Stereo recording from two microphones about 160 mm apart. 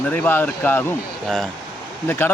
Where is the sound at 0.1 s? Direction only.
10° left (ahead or behind).